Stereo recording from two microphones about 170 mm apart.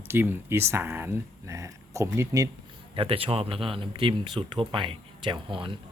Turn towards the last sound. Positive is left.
turn(degrees=-30)  # may be behind; listen again after turning